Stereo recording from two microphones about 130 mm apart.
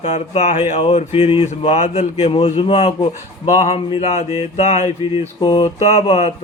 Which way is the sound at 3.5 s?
55° left (ahead or behind).